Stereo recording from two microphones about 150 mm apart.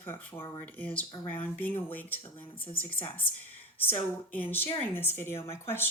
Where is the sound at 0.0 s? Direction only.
15° left (ahead or behind).